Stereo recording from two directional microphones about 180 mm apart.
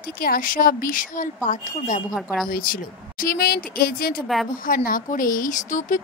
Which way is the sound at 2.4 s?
50° left (ahead or behind).